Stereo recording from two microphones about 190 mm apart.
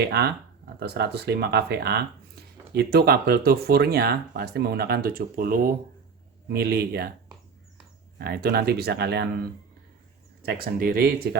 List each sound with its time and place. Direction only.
0.0 s speech: 60° right (ahead or behind)
8.2 s speech: 55° right (ahead or behind)